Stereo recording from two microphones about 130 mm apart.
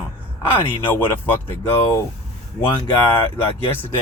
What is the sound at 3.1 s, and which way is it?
Speech, 15° left (ahead or behind).